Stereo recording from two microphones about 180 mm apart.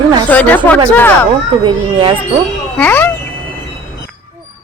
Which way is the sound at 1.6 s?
25° right (ahead or behind).